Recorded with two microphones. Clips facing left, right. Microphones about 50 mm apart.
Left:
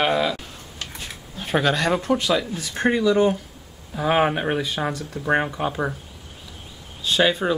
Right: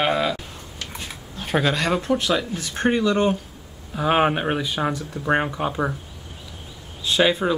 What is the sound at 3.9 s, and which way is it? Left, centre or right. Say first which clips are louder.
Speech: right 1 dB; centre.